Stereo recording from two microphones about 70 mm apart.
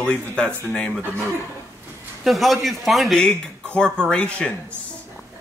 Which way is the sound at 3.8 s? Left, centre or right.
Centre.